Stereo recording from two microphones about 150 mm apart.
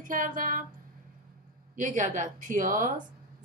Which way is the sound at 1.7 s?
55° right (ahead or behind).